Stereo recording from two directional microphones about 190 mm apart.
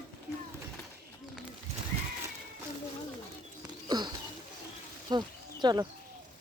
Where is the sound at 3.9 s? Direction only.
20° right (ahead or behind).